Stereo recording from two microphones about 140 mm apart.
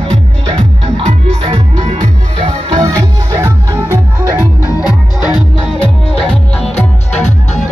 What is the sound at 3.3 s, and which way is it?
Music, 20° right (ahead or behind).